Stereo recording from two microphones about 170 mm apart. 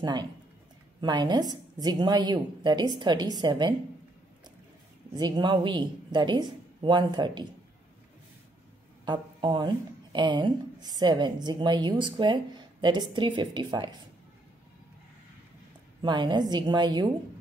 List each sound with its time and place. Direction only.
0.0 s speech: 25° right (ahead or behind)
5.1 s speech: 25° right (ahead or behind)
9.0 s speech: 25° right (ahead or behind)
16.0 s speech: 25° right (ahead or behind)